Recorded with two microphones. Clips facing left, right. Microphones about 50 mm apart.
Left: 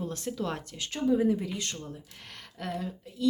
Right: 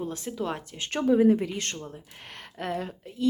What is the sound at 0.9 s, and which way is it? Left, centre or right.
A woman's voice, right.